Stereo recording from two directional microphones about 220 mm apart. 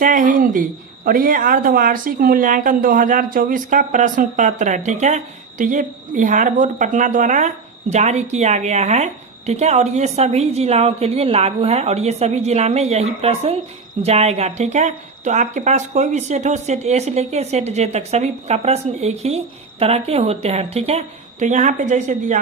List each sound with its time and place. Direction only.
0.0 s a woman's voice: 35° right (ahead or behind)